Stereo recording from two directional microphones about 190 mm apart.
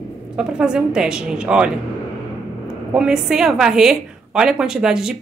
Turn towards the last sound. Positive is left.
turn(degrees=-5)  # may be behind; listen again after turning